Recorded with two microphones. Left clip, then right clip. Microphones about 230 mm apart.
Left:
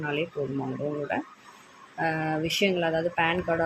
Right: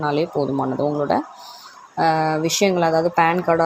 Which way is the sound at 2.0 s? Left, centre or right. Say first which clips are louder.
Right 10 dB; right.